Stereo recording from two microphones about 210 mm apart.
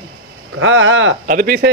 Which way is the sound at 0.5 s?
70° right (ahead or behind).